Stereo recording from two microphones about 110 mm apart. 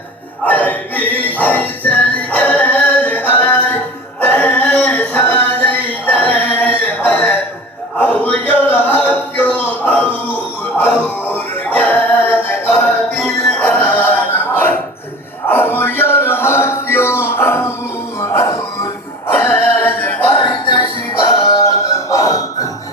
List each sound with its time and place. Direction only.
0.4 s music: 15° left (ahead or behind)
4.2 s a sound: 15° left (ahead or behind)
13.1 s music: 5° left (ahead or behind); by 22.7 s 35° left (ahead or behind)